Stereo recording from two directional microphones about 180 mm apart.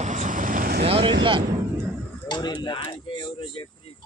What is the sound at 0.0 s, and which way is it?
Vehicle, 40° right (ahead or behind).